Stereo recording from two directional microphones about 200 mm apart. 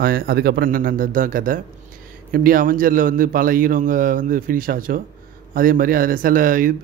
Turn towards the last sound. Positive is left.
turn(degrees=-45)  # may be behind; listen again after turning